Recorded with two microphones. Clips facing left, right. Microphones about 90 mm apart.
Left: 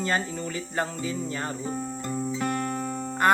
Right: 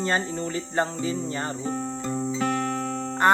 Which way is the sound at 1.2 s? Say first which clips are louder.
Right 2 dB; 5° left (ahead or behind).